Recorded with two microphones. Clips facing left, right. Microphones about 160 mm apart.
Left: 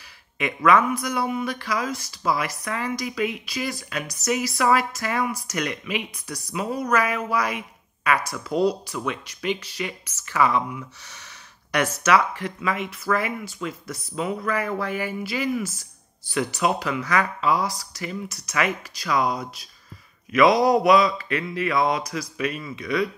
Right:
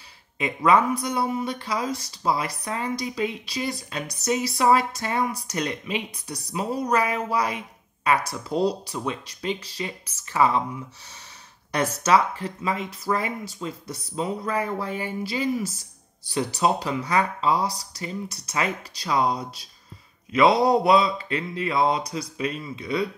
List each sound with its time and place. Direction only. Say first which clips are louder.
0.4 s speech: left 1 dB; 30° right (ahead or behind)
11.1 s a sound: left 1 dB; 85° left
11.8 s speech: even; 30° right (ahead or behind)